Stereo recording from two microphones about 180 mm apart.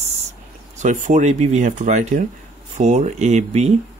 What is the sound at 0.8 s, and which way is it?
Speech, 45° right (ahead or behind).